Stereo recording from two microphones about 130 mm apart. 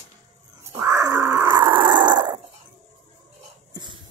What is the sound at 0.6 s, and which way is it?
Wild animals, 20° right (ahead or behind).